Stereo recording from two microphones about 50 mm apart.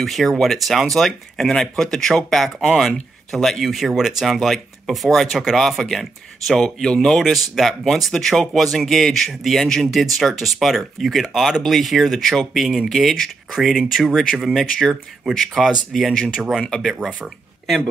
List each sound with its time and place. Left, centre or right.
0.0 s speech: centre
13.5 s speech: centre
16.9 s speech: centre